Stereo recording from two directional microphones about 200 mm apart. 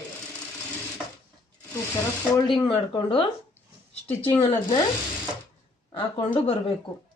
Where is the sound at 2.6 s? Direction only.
25° left (ahead or behind).